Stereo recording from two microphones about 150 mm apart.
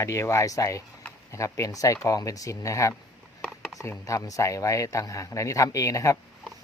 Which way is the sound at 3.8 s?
20° left (ahead or behind).